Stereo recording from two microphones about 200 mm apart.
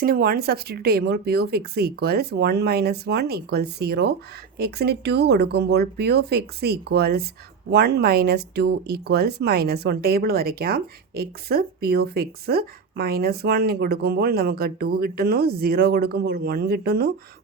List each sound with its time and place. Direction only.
0.0 s speech: 50° right (ahead or behind)